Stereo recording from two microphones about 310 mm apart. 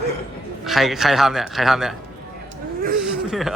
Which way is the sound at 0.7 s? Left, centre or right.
Centre.